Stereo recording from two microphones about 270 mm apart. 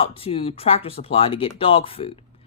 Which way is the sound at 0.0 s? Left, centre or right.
Left.